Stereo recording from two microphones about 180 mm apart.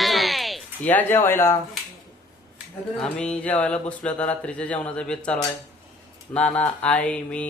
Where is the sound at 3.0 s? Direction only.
5° left (ahead or behind).